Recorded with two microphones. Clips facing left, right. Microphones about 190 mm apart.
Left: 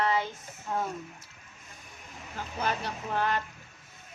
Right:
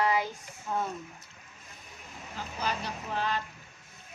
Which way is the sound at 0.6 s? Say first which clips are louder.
Even; 5° left (ahead or behind).